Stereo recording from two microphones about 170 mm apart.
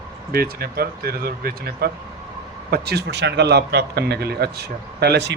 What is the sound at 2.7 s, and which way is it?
Speech, 75° right (ahead or behind).